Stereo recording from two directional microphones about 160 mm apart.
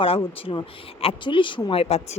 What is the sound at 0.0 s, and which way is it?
A woman's voice, 35° left (ahead or behind).